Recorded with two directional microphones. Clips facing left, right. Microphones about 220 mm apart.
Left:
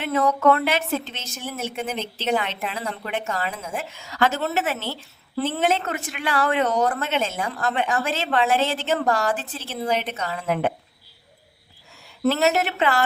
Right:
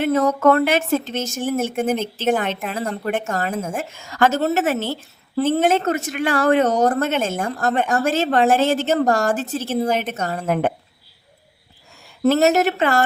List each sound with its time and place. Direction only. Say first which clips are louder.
0.0 s a woman's voice: right 4 dB; 45° right (ahead or behind)
12.2 s a woman's voice: right 5 dB; 45° right (ahead or behind)